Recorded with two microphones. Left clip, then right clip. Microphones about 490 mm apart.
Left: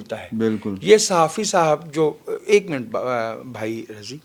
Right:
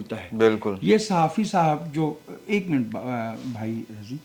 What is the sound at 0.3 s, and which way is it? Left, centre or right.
Speech, right.